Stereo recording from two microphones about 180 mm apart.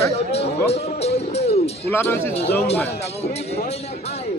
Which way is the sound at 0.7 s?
35° left (ahead or behind).